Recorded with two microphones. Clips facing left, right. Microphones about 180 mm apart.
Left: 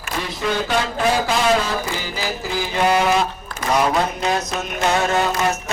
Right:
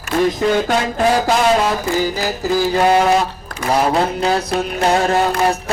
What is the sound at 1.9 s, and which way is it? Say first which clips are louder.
A man's voice: right 7 dB; 45° right (ahead or behind).